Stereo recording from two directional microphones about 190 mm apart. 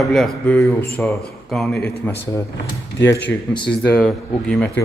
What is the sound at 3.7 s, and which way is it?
Speech, 5° left (ahead or behind).